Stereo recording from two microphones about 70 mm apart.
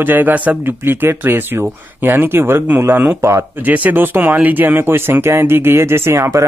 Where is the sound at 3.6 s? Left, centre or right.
Right.